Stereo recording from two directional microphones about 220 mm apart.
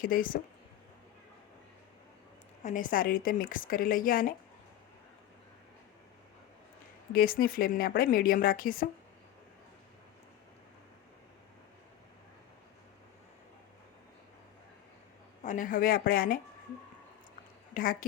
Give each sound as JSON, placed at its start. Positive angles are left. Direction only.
{"t": 0.0, "sound": "speech", "side_deg": 40}
{"t": 2.6, "sound": "speech", "side_deg": 35}
{"t": 7.1, "sound": "speech", "side_deg": 40}
{"t": 15.4, "sound": "speech", "side_deg": 35}